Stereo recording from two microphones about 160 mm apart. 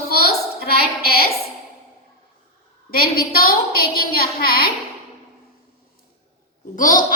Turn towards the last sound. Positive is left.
turn(degrees=55)  # may be behind; listen again after turning